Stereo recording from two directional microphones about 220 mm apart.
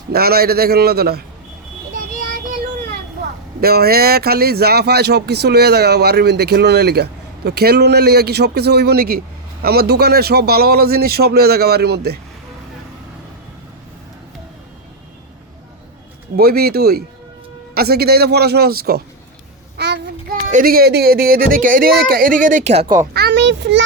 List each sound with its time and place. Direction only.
0.1 s speech: 45° right (ahead or behind)
3.6 s speech: 45° right (ahead or behind)
16.3 s speech: 45° right (ahead or behind)
19.7 s child singing: 50° right (ahead or behind)
20.5 s speech: 40° right (ahead or behind)
23.1 s speech: 50° right (ahead or behind)